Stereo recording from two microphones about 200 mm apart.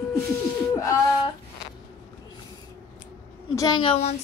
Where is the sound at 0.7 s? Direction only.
15° left (ahead or behind).